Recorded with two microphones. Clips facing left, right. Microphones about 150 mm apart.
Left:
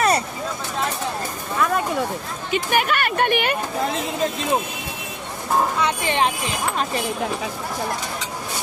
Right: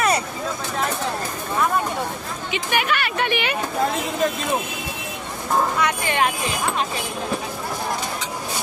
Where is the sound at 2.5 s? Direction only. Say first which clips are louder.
Left 2 dB; 45° left (ahead or behind).